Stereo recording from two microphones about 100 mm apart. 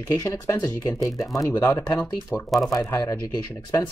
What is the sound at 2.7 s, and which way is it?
Speech, 35° left (ahead or behind).